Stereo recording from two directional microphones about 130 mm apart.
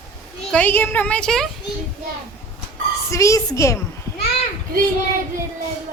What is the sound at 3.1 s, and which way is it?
Speech, 25° left (ahead or behind).